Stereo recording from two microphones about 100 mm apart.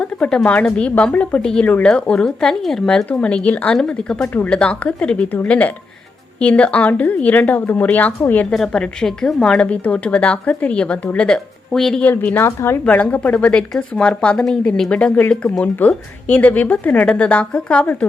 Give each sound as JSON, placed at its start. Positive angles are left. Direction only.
{"t": 0.0, "sound": "speech", "side_deg": 10}
{"t": 8.5, "sound": "speech", "side_deg": 5}
{"t": 12.0, "sound": "a woman's voice", "side_deg": 15}
{"t": 12.8, "sound": "speech", "side_deg": 15}